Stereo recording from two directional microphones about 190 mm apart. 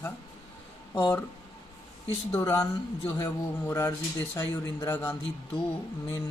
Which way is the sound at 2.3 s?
15° left (ahead or behind).